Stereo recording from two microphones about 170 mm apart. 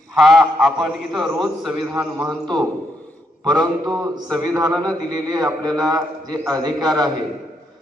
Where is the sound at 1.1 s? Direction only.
25° right (ahead or behind).